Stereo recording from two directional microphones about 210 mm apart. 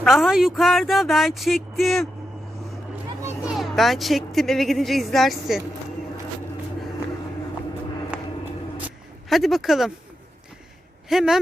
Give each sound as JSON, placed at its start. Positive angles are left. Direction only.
{"t": 0.0, "sound": "speech", "side_deg": 0}
{"t": 3.2, "sound": "speech", "side_deg": -5}
{"t": 9.3, "sound": "speech", "side_deg": 0}
{"t": 11.1, "sound": "speech", "side_deg": 0}